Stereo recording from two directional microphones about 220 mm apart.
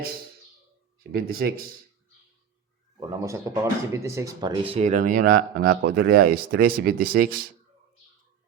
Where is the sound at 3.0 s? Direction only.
15° right (ahead or behind).